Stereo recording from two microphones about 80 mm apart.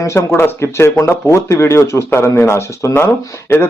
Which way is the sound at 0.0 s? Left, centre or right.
Left.